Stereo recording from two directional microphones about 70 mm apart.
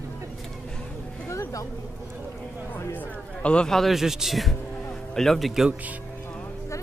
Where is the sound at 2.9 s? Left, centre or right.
Centre.